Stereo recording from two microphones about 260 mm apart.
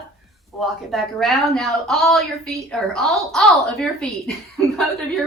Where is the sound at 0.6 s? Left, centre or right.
Centre.